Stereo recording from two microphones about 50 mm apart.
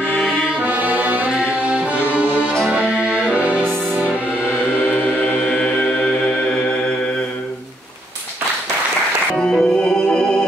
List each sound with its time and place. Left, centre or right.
0.6 s music: right
5.4 s music: left
9.4 s music: centre